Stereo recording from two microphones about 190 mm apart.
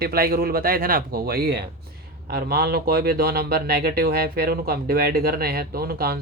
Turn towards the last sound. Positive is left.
turn(degrees=-55)  # may be behind; listen again after turning